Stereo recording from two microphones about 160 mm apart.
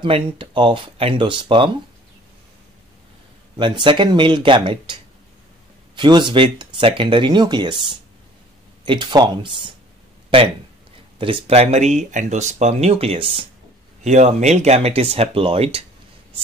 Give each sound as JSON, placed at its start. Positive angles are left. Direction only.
{"t": 0.0, "sound": "speech", "side_deg": -30}
{"t": 3.5, "sound": "speech", "side_deg": -30}
{"t": 5.9, "sound": "speech", "side_deg": -30}
{"t": 11.1, "sound": "speech", "side_deg": -35}